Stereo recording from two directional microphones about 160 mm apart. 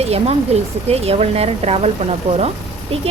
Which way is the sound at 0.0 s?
40° right (ahead or behind).